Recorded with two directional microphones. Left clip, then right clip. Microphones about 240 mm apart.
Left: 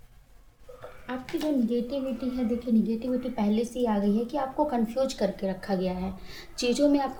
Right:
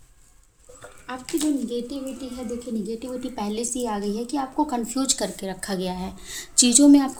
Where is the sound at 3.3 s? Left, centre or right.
Right.